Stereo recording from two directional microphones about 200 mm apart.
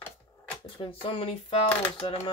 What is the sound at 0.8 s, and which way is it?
Speech, 25° left (ahead or behind).